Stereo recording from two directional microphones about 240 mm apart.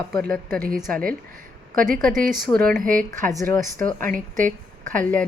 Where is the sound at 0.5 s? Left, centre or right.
Right.